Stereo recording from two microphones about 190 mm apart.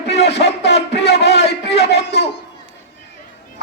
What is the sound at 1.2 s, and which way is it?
Speech, 35° left (ahead or behind).